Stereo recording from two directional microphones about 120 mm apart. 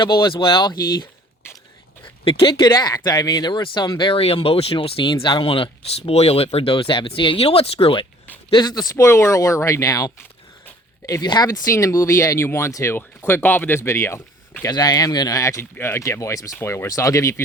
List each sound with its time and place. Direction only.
0.0 s speech: 40° left (ahead or behind)
2.2 s speech: 50° left (ahead or behind)
8.4 s speech: 40° left (ahead or behind); by 14.2 s 20° left (ahead or behind)
14.7 s speech: 35° left (ahead or behind)